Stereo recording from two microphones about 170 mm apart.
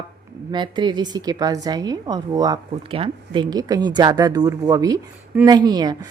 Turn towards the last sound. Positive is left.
turn(degrees=-25)  # may be behind; listen again after turning